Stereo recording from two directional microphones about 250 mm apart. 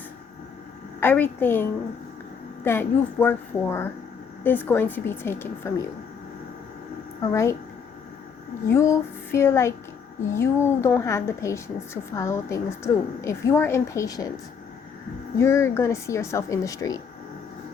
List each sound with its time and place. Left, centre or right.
0.9 s a woman's voice: centre
2.6 s a woman's voice: centre
7.2 s a woman's voice: centre
8.6 s a woman's voice: centre
15.4 s a woman's voice: centre